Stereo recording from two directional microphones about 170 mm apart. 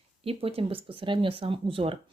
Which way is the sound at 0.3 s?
35° right (ahead or behind).